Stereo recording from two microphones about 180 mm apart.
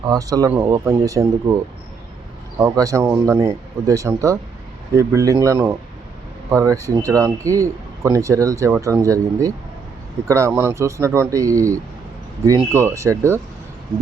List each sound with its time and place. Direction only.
0.1 s speech: 20° right (ahead or behind)
2.6 s speech: 15° right (ahead or behind)